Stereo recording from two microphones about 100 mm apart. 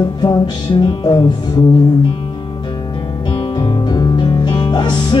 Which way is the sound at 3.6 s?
40° left (ahead or behind).